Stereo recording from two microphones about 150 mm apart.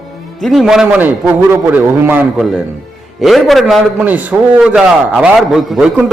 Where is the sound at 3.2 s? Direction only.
Centre (ahead or behind).